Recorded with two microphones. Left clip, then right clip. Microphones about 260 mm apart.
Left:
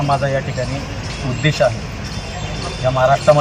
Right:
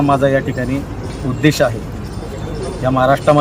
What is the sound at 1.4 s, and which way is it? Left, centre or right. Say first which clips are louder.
Speech: right 3 dB; right.